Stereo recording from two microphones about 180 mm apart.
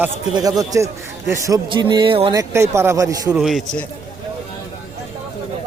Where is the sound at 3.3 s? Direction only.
Centre (ahead or behind).